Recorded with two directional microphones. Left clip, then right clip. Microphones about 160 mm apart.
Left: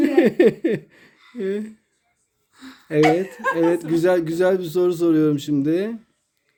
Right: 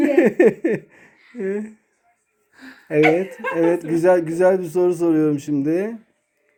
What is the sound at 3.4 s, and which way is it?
Speech, 15° left (ahead or behind).